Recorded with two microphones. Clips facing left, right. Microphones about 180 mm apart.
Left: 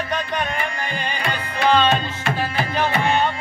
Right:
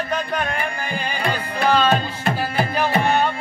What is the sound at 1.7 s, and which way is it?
Music, 10° right (ahead or behind).